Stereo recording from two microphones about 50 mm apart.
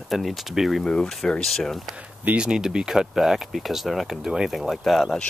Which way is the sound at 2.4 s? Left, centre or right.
Centre.